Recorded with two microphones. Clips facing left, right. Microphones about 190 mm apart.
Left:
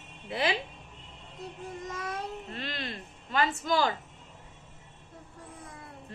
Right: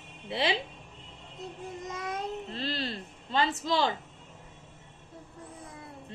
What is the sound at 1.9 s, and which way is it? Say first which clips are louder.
A child's voice: right 3 dB; 20° right (ahead or behind).